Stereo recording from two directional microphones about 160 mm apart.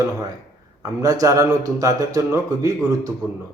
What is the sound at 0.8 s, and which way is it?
Speech, 20° right (ahead or behind).